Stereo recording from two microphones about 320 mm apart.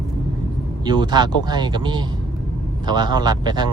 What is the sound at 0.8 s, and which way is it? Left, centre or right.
Speech, centre.